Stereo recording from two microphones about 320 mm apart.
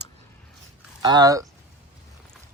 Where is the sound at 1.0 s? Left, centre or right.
Centre.